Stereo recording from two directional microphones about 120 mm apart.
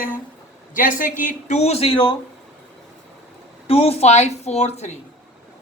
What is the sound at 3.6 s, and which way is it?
Speech, 55° left (ahead or behind).